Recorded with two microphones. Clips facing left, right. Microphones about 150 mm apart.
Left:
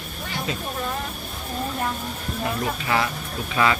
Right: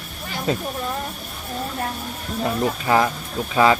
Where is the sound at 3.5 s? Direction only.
30° right (ahead or behind).